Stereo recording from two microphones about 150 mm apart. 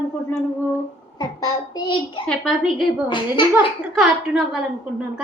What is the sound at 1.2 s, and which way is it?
A child's voice, 25° left (ahead or behind).